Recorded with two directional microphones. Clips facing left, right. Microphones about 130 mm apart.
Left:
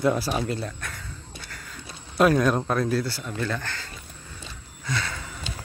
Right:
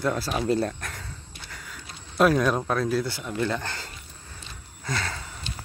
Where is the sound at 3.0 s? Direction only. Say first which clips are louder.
Right 2 dB; 20° right (ahead or behind).